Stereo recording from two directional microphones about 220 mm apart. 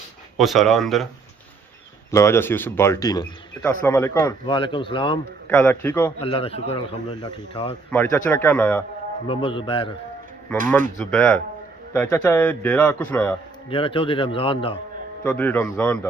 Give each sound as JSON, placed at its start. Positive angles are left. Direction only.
{"t": 0.3, "sound": "speech", "side_deg": 0}
{"t": 2.0, "sound": "a man's voice", "side_deg": 10}
{"t": 5.5, "sound": "a man's voice", "side_deg": 10}
{"t": 6.1, "sound": "a man's voice", "side_deg": 25}
{"t": 7.9, "sound": "a man's voice", "side_deg": 10}
{"t": 9.2, "sound": "a man's voice", "side_deg": 25}
{"t": 11.0, "sound": "a man's voice", "side_deg": 5}
{"t": 13.7, "sound": "a man's voice", "side_deg": 25}
{"t": 15.2, "sound": "a man's voice", "side_deg": 5}